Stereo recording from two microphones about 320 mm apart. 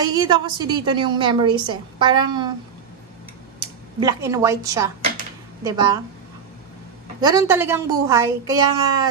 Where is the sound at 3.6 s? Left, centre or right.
Centre.